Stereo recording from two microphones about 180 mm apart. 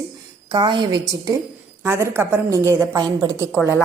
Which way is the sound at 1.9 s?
15° right (ahead or behind).